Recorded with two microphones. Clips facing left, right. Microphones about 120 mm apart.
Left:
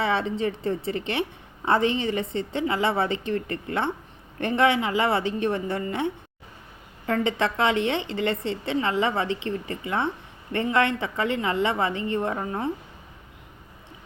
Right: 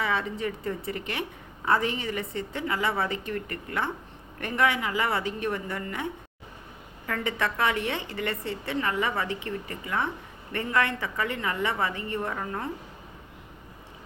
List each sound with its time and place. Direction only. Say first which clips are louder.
0.0 s a woman's voice: left 4 dB; 25° left (ahead or behind)
7.1 s a woman's voice: left 5 dB; 25° left (ahead or behind)